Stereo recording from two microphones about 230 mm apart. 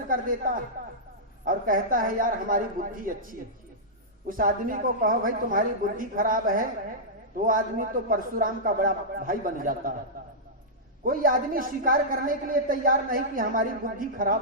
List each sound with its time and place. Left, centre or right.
0.1 s a man's voice: right
11.0 s a man's voice: right